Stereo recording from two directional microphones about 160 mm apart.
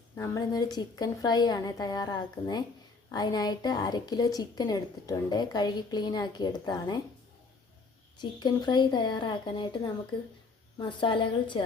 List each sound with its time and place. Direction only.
0.2 s a woman's voice: 20° left (ahead or behind)
8.2 s a woman's voice: 30° left (ahead or behind)